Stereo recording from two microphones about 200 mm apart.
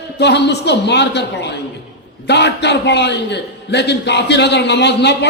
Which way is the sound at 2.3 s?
55° left (ahead or behind).